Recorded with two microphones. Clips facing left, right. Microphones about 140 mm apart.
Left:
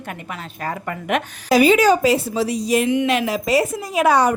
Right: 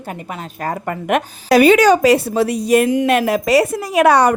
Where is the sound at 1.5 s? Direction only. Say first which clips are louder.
Right 4 dB; 65° right (ahead or behind).